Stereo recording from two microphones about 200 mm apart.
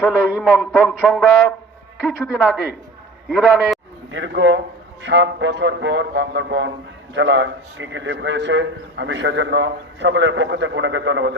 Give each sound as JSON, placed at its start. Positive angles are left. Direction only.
{"t": 0.0, "sound": "a sound", "side_deg": -5}
{"t": 2.0, "sound": "a man's voice", "side_deg": 0}
{"t": 4.1, "sound": "speech", "side_deg": -65}